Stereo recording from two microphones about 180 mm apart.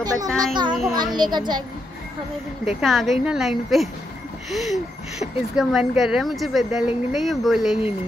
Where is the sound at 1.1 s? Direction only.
25° right (ahead or behind).